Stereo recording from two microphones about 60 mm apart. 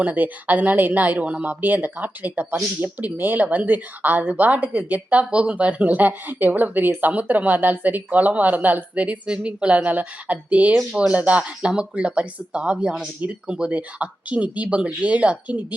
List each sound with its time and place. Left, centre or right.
0.0 s speech: right